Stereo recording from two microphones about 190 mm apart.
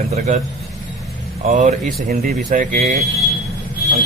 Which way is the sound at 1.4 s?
40° right (ahead or behind).